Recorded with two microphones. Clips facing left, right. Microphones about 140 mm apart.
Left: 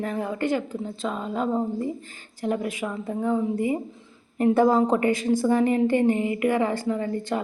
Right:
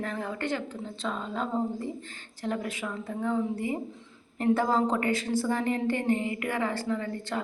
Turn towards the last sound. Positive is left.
turn(degrees=15)  # may be behind; listen again after turning